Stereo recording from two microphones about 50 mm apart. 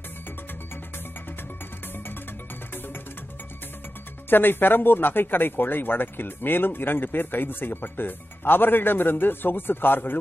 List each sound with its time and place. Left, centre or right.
4.3 s speech: left